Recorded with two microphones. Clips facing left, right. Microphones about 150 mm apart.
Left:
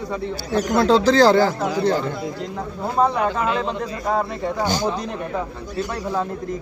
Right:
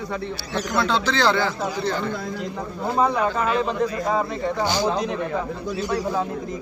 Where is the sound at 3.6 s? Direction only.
Centre (ahead or behind).